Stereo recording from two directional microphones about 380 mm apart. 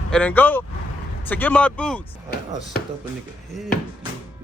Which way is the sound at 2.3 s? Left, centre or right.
Left.